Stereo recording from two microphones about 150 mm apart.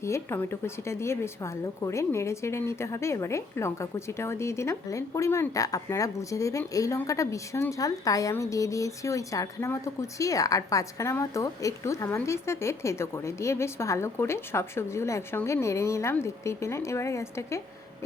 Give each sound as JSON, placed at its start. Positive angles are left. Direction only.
{"t": 0.0, "sound": "a woman's voice", "side_deg": 15}